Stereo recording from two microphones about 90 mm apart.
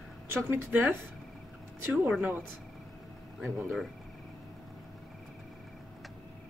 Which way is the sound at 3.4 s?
Centre (ahead or behind).